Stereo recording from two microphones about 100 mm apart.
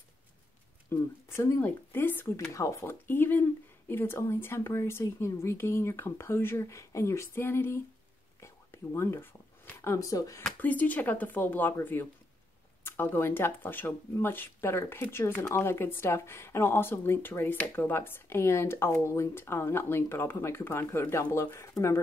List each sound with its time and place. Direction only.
0.8 s speech: 25° left (ahead or behind)
8.4 s whispering: 30° left (ahead or behind)
9.8 s speech: 30° left (ahead or behind)
10.6 s a woman's voice: 15° left (ahead or behind)